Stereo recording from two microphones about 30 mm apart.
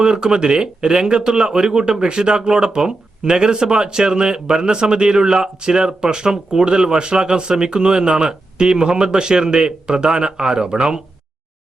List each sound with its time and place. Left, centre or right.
0.0 s speech: right